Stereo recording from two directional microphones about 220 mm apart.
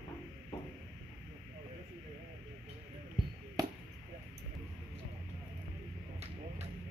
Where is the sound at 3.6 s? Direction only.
15° right (ahead or behind).